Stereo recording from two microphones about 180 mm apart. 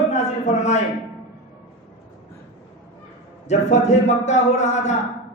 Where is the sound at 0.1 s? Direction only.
40° left (ahead or behind).